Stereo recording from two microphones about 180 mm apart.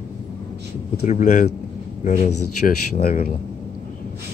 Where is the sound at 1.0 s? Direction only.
40° left (ahead or behind).